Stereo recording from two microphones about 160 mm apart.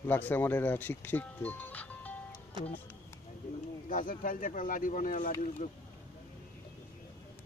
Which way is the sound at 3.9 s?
60° left (ahead or behind).